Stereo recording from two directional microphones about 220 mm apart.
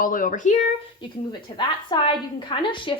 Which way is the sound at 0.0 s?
40° left (ahead or behind).